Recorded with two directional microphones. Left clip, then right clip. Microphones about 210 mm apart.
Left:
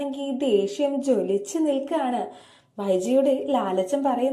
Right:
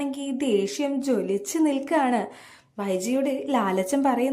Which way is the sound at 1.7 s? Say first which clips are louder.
Right 2 dB; 20° right (ahead or behind).